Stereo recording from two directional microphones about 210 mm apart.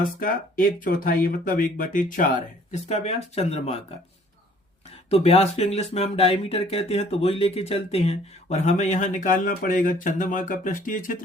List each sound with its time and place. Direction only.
0.0 s speech: 40° left (ahead or behind)
5.0 s speech: 30° left (ahead or behind)